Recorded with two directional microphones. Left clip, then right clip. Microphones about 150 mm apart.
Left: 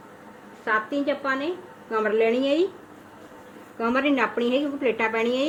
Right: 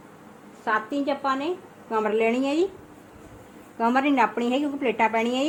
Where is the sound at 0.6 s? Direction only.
55° right (ahead or behind).